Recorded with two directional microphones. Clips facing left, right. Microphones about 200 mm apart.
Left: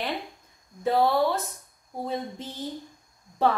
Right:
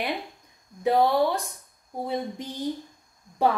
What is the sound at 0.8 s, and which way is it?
A woman's voice, 15° right (ahead or behind).